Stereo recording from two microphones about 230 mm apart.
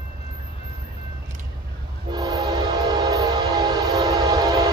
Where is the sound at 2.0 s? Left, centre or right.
Centre.